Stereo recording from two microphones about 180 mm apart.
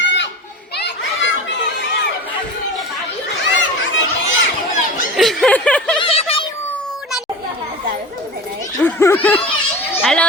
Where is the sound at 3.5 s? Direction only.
90° left.